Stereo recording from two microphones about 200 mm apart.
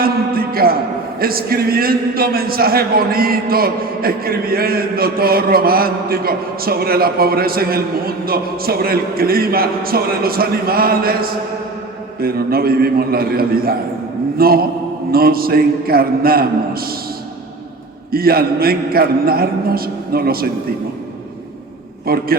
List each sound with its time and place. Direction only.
0.0 s a sound: 50° right (ahead or behind)
1.2 s a man's voice: 50° right (ahead or behind)
18.1 s a man's voice: 50° right (ahead or behind)
22.0 s a man's voice: 50° right (ahead or behind)